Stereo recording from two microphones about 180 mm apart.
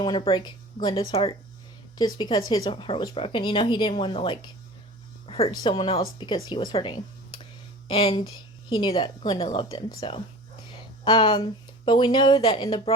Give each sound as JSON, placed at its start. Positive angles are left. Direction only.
{"t": 0.0, "sound": "speech", "side_deg": 25}
{"t": 5.2, "sound": "a sound", "side_deg": 35}
{"t": 5.5, "sound": "speech", "side_deg": 25}